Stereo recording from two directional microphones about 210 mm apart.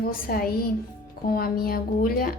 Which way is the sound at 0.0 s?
45° left (ahead or behind).